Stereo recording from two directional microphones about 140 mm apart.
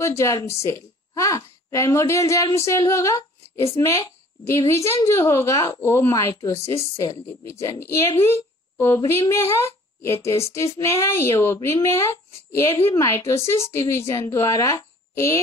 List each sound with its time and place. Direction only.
0.0 s a woman's voice: 20° left (ahead or behind)